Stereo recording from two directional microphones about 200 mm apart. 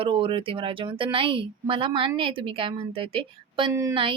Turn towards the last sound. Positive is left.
turn(degrees=-20)  # may be behind; listen again after turning